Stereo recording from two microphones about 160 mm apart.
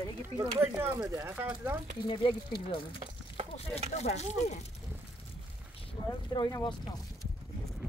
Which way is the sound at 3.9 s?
45° left (ahead or behind).